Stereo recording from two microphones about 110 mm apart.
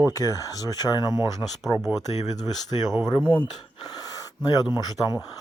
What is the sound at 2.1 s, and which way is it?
Speech, 90° left.